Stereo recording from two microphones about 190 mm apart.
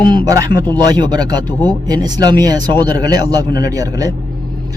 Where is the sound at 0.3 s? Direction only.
20° right (ahead or behind).